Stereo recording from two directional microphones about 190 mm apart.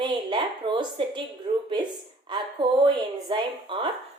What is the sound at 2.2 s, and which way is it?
A woman's voice, 25° right (ahead or behind).